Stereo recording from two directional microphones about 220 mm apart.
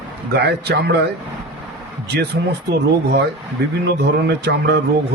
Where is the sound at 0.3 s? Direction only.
50° right (ahead or behind).